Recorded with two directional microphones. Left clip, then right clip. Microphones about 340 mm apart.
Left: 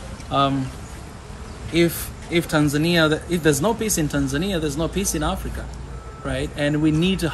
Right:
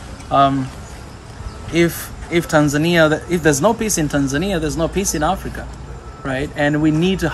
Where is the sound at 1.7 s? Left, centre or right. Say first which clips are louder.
Right 3 dB; centre.